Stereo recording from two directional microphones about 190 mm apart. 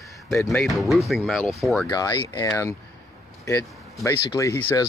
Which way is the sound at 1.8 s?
20° left (ahead or behind).